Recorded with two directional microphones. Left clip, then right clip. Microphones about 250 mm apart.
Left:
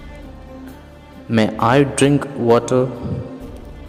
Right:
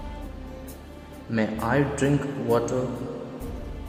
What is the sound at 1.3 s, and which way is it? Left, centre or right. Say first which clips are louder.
A man's voice: left 10 dB; left.